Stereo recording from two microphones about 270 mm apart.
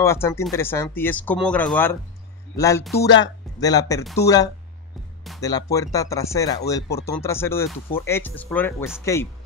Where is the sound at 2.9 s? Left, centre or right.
Left.